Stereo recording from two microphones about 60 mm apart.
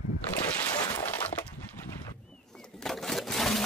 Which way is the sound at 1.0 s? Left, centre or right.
Left.